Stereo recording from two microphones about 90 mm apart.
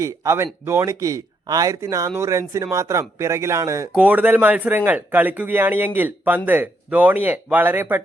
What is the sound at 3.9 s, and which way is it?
Speech, 15° right (ahead or behind).